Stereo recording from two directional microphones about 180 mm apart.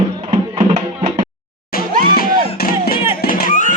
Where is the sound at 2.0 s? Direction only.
55° left (ahead or behind).